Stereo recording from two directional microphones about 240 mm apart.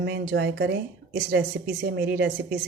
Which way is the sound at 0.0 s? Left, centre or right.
Right.